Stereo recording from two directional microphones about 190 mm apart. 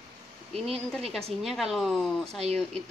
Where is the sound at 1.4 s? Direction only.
Centre (ahead or behind).